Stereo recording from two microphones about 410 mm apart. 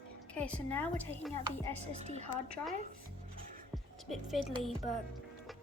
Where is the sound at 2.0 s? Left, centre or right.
Centre.